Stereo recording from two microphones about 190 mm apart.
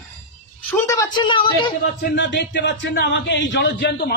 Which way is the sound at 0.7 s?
15° left (ahead or behind).